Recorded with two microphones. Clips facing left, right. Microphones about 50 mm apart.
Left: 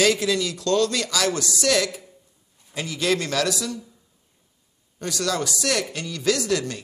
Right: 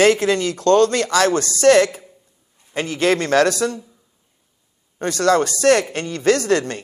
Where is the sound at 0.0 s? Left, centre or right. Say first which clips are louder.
Right 6 dB; right.